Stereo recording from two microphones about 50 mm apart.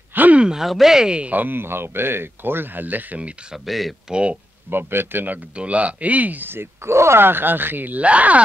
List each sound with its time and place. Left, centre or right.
0.1 s a sound: right
0.4 s a sound: centre
0.7 s speech: centre
1.3 s speech: right
3.5 s speech: centre
4.1 s speech: right
4.6 s speech: right
5.6 s speech: right
6.5 s speech: right
8.0 s speech: right